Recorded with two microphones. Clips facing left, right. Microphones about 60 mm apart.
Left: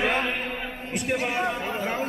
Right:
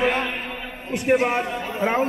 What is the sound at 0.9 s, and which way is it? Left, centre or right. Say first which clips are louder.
A man's voice: right 7 dB; right.